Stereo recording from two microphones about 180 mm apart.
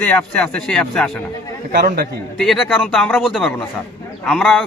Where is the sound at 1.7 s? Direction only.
55° right (ahead or behind).